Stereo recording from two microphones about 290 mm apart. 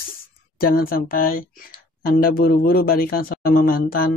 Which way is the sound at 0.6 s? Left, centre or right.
Left.